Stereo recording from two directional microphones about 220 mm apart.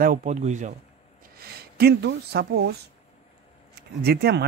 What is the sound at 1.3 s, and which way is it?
Speech, 45° right (ahead or behind).